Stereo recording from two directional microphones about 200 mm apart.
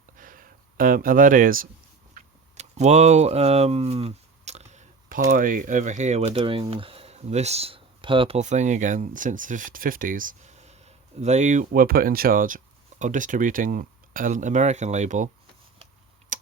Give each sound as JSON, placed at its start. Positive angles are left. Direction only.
{"t": 0.2, "sound": "a sound", "side_deg": -45}
{"t": 5.3, "sound": "speech", "side_deg": -40}
{"t": 16.3, "sound": "typing", "side_deg": -40}